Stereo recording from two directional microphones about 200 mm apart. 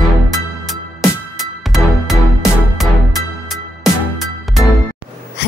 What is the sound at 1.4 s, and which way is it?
Music, centre (ahead or behind).